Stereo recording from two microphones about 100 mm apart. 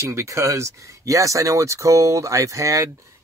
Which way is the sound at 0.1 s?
30° right (ahead or behind).